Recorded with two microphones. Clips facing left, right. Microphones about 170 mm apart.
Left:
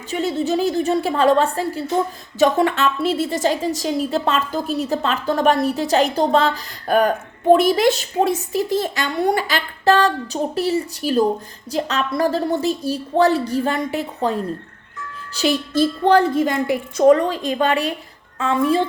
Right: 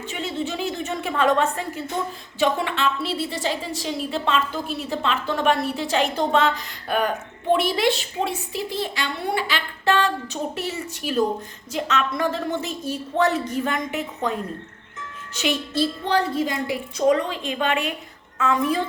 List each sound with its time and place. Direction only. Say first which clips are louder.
0.1 s a woman's voice: left 9 dB; 40° left (ahead or behind)
2.4 s a woman's voice: left 6 dB; 45° left (ahead or behind)
15.4 s a woman's voice: left 5 dB; 40° left (ahead or behind)